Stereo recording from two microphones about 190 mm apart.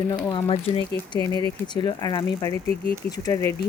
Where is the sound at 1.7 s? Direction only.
20° left (ahead or behind).